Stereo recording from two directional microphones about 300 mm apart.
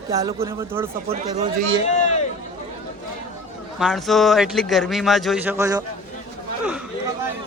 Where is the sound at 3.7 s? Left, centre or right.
Centre.